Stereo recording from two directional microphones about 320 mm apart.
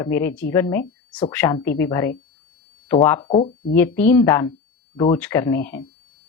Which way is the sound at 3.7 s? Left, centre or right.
Centre.